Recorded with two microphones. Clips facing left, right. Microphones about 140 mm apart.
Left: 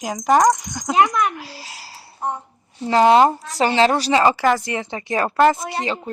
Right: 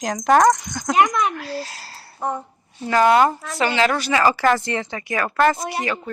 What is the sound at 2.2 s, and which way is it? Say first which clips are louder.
Speech: right 1 dB; 90° right.